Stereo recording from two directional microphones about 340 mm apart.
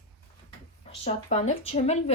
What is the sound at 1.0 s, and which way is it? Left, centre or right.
Speech, centre.